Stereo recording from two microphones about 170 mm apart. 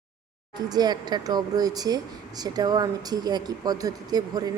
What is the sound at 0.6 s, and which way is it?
Speech, 25° right (ahead or behind).